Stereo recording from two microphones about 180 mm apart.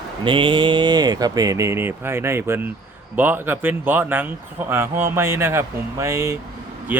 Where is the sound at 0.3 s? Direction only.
25° right (ahead or behind).